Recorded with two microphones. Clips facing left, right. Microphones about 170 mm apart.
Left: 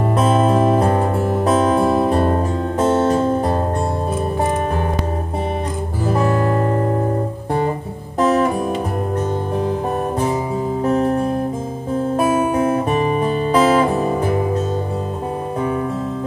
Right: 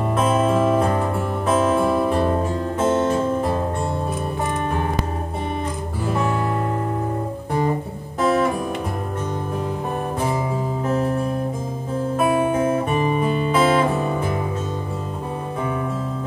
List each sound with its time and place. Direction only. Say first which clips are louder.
0.1 s music: left 3 dB; 35° left (ahead or behind)
6.0 s music: left 5 dB; 40° left (ahead or behind)
8.2 s music: left 3 dB; 40° left (ahead or behind)
13.1 s music: left 3 dB; 40° left (ahead or behind)